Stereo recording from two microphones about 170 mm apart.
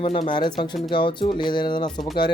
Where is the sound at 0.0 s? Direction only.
30° left (ahead or behind).